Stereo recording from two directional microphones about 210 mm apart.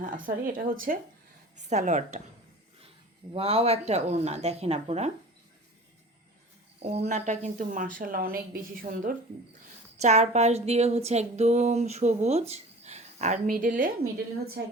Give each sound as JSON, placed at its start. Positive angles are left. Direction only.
{"t": 0.0, "sound": "speech", "side_deg": -40}
{"t": 3.3, "sound": "speech", "side_deg": -30}
{"t": 6.8, "sound": "speech", "side_deg": -30}